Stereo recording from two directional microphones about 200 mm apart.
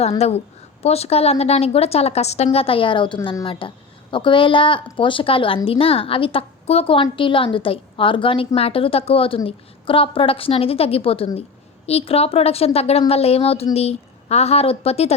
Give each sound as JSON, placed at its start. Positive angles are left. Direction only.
{"t": 0.2, "sound": "a woman's voice", "side_deg": 30}